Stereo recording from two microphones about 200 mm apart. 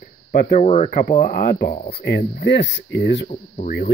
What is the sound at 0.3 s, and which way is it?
Speech, 45° left (ahead or behind).